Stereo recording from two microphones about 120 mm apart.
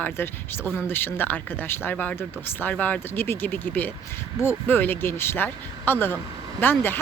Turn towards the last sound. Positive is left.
turn(degrees=15)  # may be behind; listen again after turning